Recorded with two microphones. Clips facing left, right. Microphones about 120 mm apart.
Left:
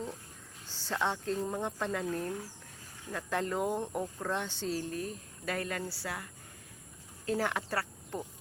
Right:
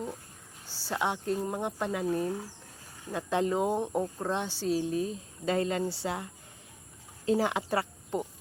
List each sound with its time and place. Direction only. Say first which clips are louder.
0.9 s speech: right 2 dB; 15° right (ahead or behind)